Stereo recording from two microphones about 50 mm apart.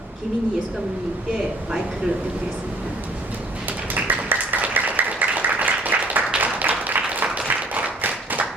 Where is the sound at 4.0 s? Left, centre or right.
Right.